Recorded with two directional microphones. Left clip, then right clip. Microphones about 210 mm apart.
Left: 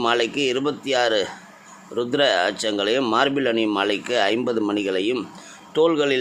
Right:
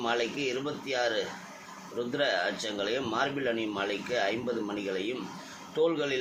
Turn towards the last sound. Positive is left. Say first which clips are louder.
# left 9 dB
turn(degrees=55)  # may be behind; listen again after turning